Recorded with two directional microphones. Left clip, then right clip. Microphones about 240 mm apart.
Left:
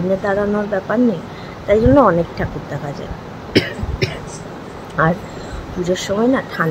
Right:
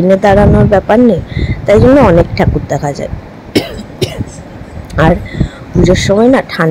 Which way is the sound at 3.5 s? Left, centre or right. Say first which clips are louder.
Right 3 dB; right.